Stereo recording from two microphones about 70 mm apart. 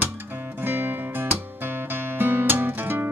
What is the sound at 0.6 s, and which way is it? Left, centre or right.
Music, right.